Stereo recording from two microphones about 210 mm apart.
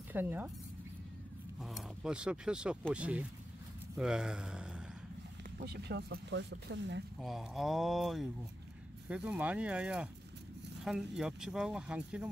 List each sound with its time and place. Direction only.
0.1 s speech: 10° right (ahead or behind)
1.6 s speech: centre (ahead or behind)
5.6 s speech: 50° right (ahead or behind)
7.2 s speech: centre (ahead or behind)